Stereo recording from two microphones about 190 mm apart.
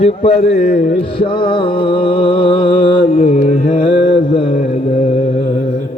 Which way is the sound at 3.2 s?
40° left (ahead or behind).